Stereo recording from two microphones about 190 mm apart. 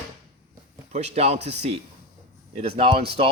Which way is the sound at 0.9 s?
35° right (ahead or behind).